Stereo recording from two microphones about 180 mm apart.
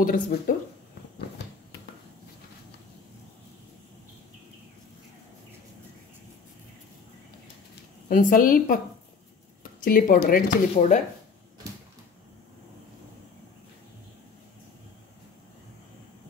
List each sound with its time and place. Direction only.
0.0 s a woman's voice: 50° left (ahead or behind)
8.1 s a woman's voice: 50° left (ahead or behind)